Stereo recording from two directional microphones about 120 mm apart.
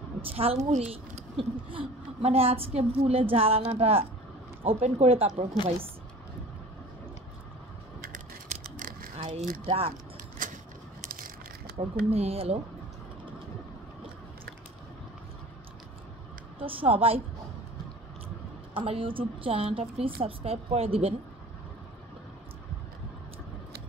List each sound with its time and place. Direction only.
0.2 s a woman's voice: 55° right (ahead or behind)
0.7 s a woman's voice: 65° right (ahead or behind)
8.1 s a sound: 90° right
9.7 s a woman's voice: 55° right (ahead or behind)
10.4 s a sound: 90° right
11.7 s a woman's voice: 55° right (ahead or behind)
16.5 s a woman's voice: 50° right (ahead or behind)
18.7 s a woman's voice: 50° right (ahead or behind)